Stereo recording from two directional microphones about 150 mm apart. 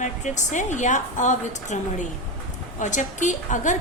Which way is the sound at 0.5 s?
55° left (ahead or behind).